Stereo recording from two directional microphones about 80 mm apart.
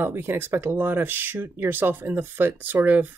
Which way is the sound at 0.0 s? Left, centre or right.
Right.